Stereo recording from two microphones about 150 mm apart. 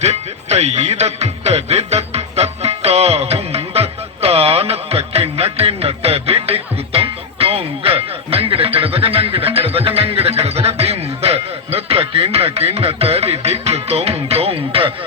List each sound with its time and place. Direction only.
0.0 s music: 45° right (ahead or behind)